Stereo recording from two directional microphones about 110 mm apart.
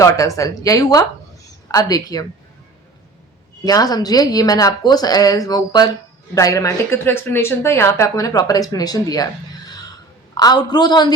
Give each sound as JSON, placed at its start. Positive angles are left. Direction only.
{"t": 0.0, "sound": "speech", "side_deg": 30}
{"t": 3.6, "sound": "speech", "side_deg": 35}
{"t": 10.3, "sound": "speech", "side_deg": 40}